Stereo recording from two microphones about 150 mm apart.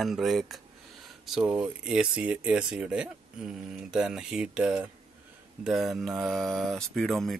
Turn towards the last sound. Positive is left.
turn(degrees=0)  # may be behind; listen again after turning